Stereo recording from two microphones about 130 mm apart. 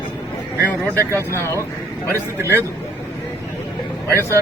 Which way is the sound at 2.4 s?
20° right (ahead or behind).